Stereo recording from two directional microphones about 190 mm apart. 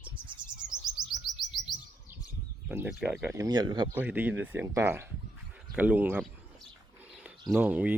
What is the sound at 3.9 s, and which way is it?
Speech, 10° right (ahead or behind).